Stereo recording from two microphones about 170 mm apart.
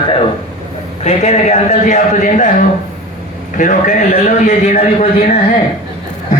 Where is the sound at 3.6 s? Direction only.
45° left (ahead or behind).